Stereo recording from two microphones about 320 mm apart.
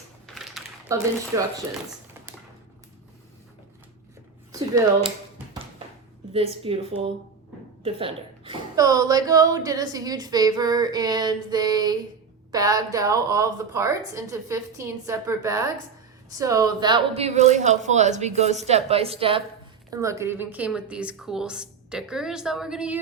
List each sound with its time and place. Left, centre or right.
0.3 s typewriter: centre
1.3 s a woman's voice: centre
4.5 s a sound: centre
6.7 s a woman's voice: centre